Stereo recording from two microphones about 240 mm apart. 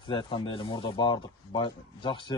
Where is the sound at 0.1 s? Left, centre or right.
Left.